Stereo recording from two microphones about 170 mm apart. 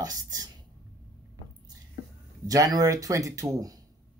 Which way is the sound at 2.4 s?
20° right (ahead or behind).